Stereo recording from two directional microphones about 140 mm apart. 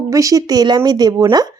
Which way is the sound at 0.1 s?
25° right (ahead or behind).